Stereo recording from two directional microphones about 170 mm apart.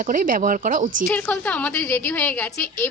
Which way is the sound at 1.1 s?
10° left (ahead or behind).